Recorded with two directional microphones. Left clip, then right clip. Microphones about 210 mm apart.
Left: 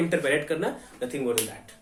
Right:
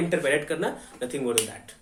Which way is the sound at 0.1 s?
10° right (ahead or behind).